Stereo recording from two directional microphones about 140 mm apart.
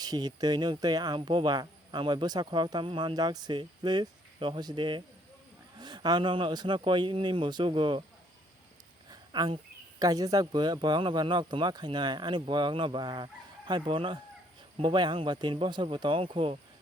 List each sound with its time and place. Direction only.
0.0 s speech: 30° right (ahead or behind)
9.0 s a sound: 30° right (ahead or behind)
10.0 s speech: 25° right (ahead or behind)